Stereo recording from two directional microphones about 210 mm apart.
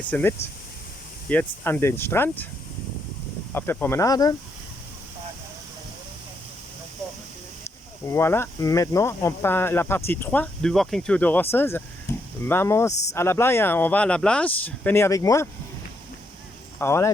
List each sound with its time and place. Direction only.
0.1 s speech: 10° left (ahead or behind)
3.5 s speech: 10° left (ahead or behind)
8.0 s speech: 15° left (ahead or behind)
12.1 s a sound: 15° left (ahead or behind)
12.5 s speech: 10° left (ahead or behind)
12.9 s speech: 30° left (ahead or behind)
13.1 s speech: 10° left (ahead or behind)
16.7 s speech: 10° left (ahead or behind)